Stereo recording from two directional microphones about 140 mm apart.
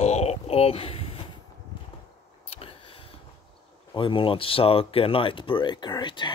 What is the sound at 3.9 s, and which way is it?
Speech, 35° left (ahead or behind).